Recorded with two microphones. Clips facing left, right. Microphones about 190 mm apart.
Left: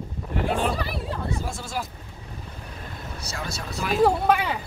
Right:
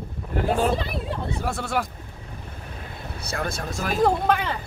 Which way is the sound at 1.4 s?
65° right (ahead or behind).